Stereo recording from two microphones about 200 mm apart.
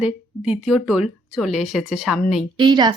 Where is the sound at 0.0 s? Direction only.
5° right (ahead or behind).